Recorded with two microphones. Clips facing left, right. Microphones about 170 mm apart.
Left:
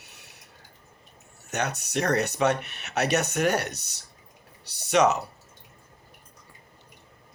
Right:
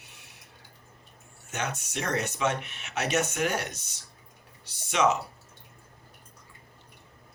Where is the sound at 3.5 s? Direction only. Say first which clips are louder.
Left 5 dB; 65° left (ahead or behind).